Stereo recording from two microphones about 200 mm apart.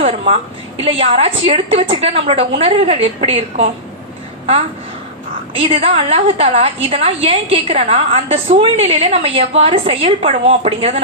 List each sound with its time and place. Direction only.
0.0 s a woman's voice: 30° right (ahead or behind)
5.5 s a woman's voice: 25° right (ahead or behind)